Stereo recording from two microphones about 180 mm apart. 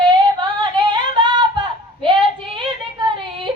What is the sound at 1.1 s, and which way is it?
Female singing, 25° right (ahead or behind).